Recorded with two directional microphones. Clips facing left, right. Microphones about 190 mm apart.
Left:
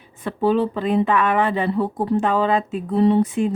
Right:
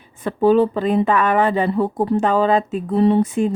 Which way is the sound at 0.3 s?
45° right (ahead or behind).